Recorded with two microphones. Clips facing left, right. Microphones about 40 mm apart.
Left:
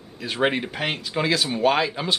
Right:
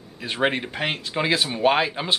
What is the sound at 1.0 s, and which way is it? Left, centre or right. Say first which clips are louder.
Speech: even; centre.